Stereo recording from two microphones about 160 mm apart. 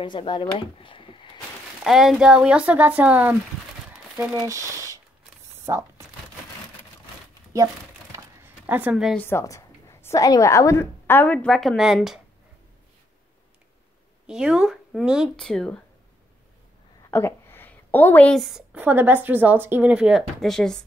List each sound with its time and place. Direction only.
0.0 s speech: 30° left (ahead or behind)
1.9 s speech: centre (ahead or behind)
4.4 s speech: 20° right (ahead or behind)
7.5 s a sound: 20° right (ahead or behind)
9.1 s a woman's voice: 15° left (ahead or behind); by 12.2 s 5° right (ahead or behind)
14.2 s a woman's voice: 5° right (ahead or behind)
17.1 s a woman's voice: 15° left (ahead or behind)